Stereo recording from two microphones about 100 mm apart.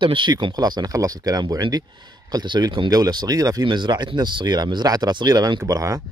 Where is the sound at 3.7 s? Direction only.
50° right (ahead or behind); by 6.0 s 35° right (ahead or behind).